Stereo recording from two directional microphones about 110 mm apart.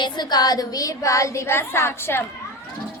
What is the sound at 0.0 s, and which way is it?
A woman's voice, 40° left (ahead or behind).